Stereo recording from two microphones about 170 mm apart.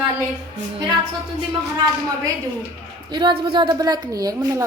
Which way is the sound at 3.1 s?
30° right (ahead or behind).